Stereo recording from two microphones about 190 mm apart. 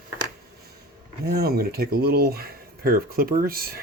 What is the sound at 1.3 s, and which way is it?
Speech, 50° right (ahead or behind).